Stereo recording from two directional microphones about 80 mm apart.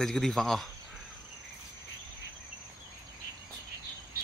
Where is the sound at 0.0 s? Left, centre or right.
Centre.